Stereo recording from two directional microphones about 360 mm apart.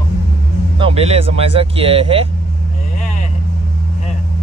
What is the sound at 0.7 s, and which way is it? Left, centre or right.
Speech, centre.